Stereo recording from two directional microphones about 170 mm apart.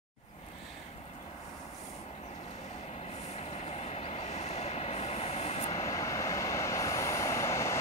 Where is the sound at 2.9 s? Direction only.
40° left (ahead or behind).